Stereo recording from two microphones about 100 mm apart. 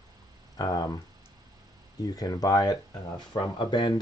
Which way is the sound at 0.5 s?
40° left (ahead or behind).